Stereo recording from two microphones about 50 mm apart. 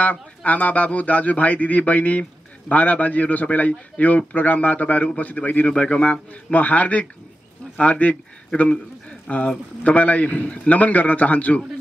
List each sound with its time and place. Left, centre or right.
0.0 s a man's voice: left
9.3 s a man's voice: left